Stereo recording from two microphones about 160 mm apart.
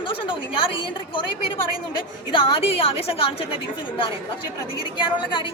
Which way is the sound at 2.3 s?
30° left (ahead or behind).